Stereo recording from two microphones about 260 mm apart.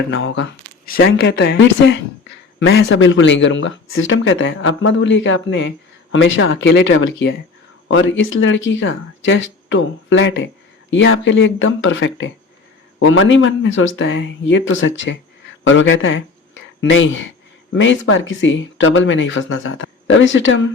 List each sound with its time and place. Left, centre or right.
0.1 s speech: left